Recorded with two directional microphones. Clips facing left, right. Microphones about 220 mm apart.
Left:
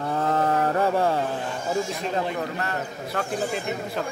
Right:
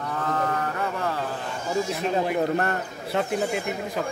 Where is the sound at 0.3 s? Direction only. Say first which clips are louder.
Left 5 dB; 30° left (ahead or behind).